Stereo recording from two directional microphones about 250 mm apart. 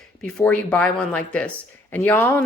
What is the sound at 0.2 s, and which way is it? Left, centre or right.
A woman's voice, centre.